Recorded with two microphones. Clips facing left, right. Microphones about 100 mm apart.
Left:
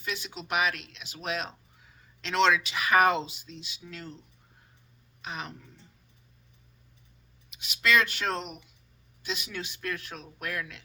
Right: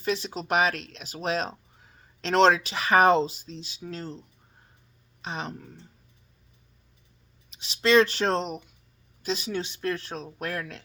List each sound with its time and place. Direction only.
0.0 s speech: 35° right (ahead or behind)
5.2 s speech: 30° right (ahead or behind)
7.5 s speech: 30° right (ahead or behind)